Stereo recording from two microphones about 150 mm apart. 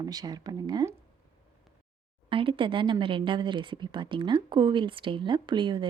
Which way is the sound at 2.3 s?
35° right (ahead or behind).